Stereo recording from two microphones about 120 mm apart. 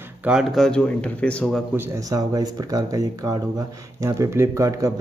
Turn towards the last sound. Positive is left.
turn(degrees=-25)  # may be behind; listen again after turning